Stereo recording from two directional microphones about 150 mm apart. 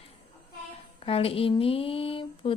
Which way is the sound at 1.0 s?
40° left (ahead or behind).